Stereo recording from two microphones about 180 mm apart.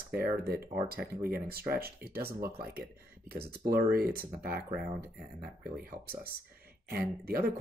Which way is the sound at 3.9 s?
55° right (ahead or behind).